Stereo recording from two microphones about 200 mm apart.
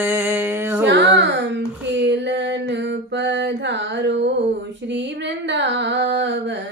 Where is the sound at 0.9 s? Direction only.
60° right (ahead or behind).